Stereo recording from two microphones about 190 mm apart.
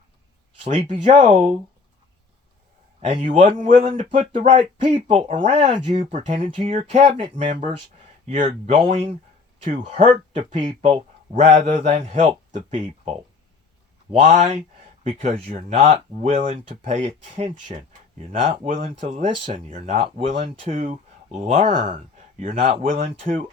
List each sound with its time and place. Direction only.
0.6 s speech: 40° right (ahead or behind)
3.0 s speech: 35° right (ahead or behind)
21.8 s speech: 25° right (ahead or behind)